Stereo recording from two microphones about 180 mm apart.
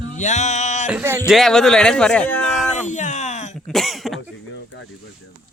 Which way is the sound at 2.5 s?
40° left (ahead or behind).